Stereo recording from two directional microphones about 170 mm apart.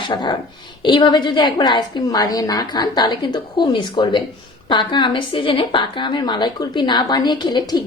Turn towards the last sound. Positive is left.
turn(degrees=25)  # may be behind; listen again after turning